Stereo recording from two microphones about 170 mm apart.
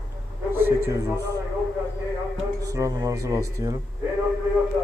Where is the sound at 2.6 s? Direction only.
20° right (ahead or behind).